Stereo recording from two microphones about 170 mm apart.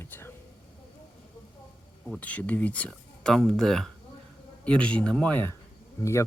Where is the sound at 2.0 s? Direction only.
5° left (ahead or behind).